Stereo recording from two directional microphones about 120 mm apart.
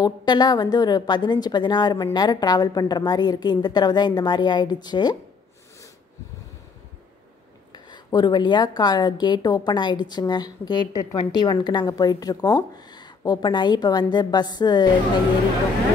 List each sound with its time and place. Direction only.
0.0 s a woman's voice: 35° left (ahead or behind)
7.7 s a woman's voice: 35° left (ahead or behind)